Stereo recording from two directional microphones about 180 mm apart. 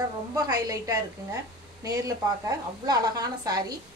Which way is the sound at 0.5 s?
20° right (ahead or behind).